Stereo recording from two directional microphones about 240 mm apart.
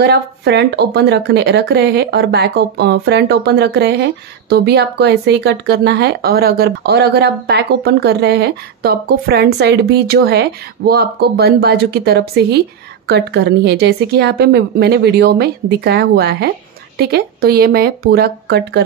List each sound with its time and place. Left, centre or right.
0.0 s speech: right